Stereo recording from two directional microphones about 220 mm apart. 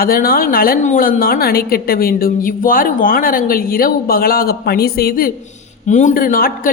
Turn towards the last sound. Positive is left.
turn(degrees=40)  # may be behind; listen again after turning